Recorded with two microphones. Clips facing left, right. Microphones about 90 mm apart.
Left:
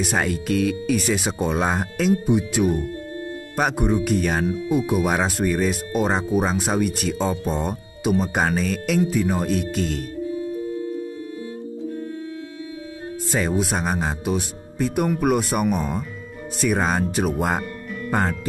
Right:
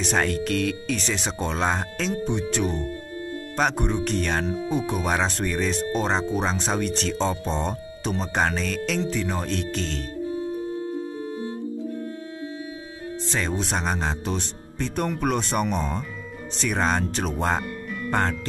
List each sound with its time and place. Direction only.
0.0 s speech: 10° left (ahead or behind)
13.3 s speech: 10° left (ahead or behind)